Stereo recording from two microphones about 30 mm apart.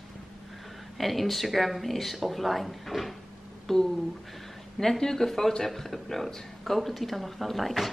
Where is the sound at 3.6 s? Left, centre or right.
Centre.